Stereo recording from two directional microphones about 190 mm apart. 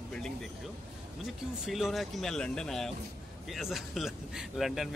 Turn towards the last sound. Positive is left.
turn(degrees=0)  # may be behind; listen again after turning